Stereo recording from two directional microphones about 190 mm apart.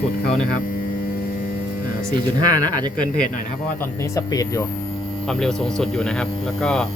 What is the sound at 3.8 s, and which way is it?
Speech, 15° left (ahead or behind).